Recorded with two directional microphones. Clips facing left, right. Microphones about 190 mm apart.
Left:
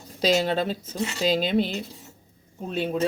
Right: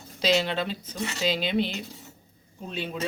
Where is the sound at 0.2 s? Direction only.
45° left (ahead or behind).